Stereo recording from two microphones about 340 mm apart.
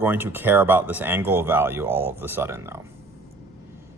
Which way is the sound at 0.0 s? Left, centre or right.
Centre.